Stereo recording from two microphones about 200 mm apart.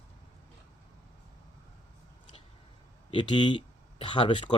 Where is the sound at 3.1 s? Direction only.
25° left (ahead or behind).